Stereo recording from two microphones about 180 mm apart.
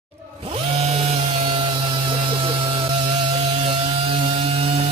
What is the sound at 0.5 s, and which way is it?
Power tool, 30° right (ahead or behind).